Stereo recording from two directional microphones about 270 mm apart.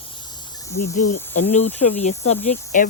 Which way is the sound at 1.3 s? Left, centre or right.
Left.